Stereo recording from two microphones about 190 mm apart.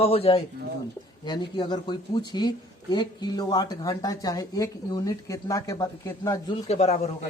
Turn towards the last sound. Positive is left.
turn(degrees=35)  # may be behind; listen again after turning